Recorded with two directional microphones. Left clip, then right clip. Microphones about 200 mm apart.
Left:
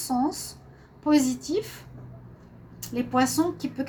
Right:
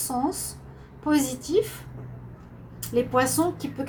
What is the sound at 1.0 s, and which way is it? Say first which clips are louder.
Speech: left 2 dB; 45° left (ahead or behind).